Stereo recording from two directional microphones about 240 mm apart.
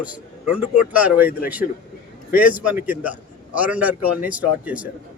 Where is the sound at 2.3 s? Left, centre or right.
Centre.